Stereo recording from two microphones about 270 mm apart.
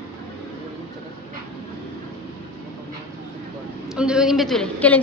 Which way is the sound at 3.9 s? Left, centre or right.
Centre.